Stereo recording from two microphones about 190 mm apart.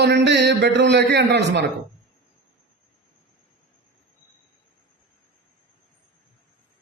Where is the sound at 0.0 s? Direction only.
65° right (ahead or behind).